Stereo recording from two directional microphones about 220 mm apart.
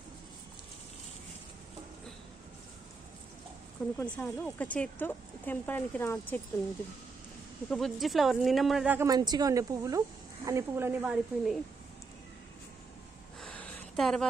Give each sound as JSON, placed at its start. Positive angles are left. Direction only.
{"t": 3.9, "sound": "speech", "side_deg": 5}
{"t": 7.7, "sound": "a woman's voice", "side_deg": 0}
{"t": 13.4, "sound": "a sound", "side_deg": 5}